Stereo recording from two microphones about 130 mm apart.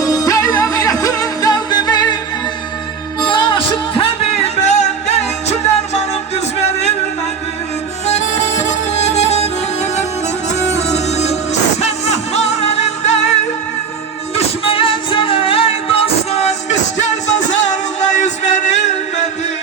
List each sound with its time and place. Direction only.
0.0 s music: 25° left (ahead or behind)
3.2 s music: 40° left (ahead or behind); by 6.9 s 55° left (ahead or behind)
8.0 s music: 60° left (ahead or behind)
14.3 s music: 45° left (ahead or behind); by 18.9 s 65° left (ahead or behind)